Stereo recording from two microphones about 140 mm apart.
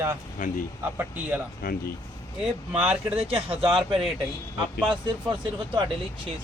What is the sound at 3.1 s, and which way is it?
Speech, 45° right (ahead or behind).